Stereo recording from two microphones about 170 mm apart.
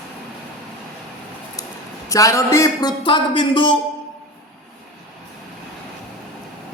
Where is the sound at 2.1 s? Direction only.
20° left (ahead or behind).